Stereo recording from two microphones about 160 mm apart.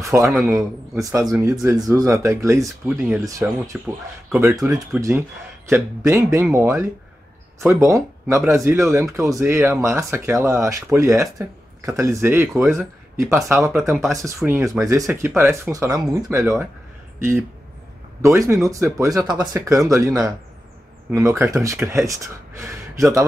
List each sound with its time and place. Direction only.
0.0 s a man's voice: 20° right (ahead or behind)
12.5 s speech: centre (ahead or behind)
13.1 s speech: 15° right (ahead or behind)